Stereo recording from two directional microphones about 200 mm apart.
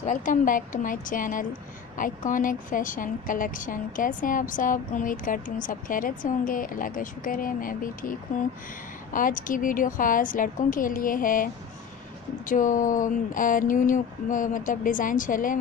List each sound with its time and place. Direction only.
0.0 s a woman's voice: 40° left (ahead or behind)